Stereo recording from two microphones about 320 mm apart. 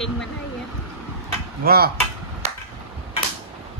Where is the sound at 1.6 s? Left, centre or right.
Right.